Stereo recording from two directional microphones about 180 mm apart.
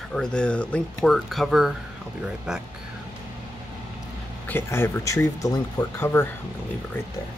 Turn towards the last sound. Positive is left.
turn(degrees=15)  # may be behind; listen again after turning